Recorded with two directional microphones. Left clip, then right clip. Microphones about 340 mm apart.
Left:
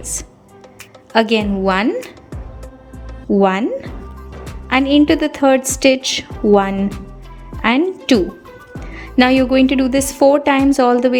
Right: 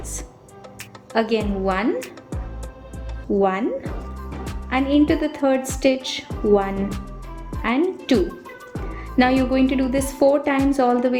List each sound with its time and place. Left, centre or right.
0.0 s music: centre
1.1 s a woman's voice: left
3.3 s a woman's voice: left